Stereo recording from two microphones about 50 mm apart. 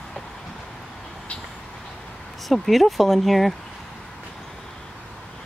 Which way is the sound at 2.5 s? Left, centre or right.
Centre.